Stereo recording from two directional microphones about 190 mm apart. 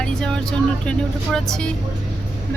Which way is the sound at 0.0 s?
5° left (ahead or behind).